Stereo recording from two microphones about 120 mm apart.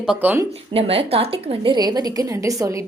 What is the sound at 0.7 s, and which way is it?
A woman's voice, 50° right (ahead or behind).